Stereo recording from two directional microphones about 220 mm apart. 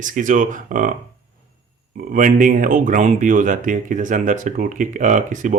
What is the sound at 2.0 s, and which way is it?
Speech, 40° right (ahead or behind).